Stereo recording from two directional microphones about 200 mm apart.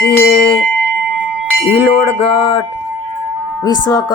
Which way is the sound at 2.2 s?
30° left (ahead or behind).